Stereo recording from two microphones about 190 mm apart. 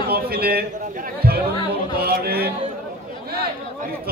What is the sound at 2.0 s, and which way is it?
Speech, 55° right (ahead or behind).